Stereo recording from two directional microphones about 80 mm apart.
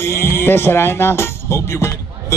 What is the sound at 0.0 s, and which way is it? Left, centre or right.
Speech, left.